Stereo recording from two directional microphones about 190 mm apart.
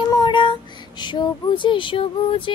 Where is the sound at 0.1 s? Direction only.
25° left (ahead or behind).